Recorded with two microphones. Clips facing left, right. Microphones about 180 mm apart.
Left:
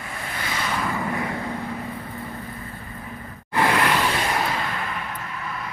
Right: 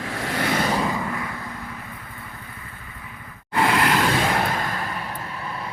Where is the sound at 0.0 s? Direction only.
90° right.